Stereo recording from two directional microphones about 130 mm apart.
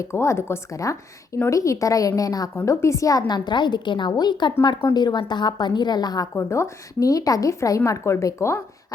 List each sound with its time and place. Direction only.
0.0 s a woman's voice: 20° left (ahead or behind)